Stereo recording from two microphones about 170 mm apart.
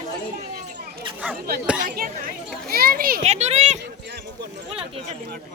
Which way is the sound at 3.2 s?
40° right (ahead or behind).